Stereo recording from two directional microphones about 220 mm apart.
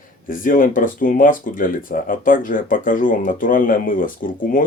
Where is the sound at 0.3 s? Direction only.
40° left (ahead or behind).